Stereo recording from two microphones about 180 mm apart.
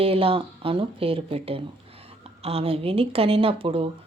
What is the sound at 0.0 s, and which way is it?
Speech, 30° right (ahead or behind).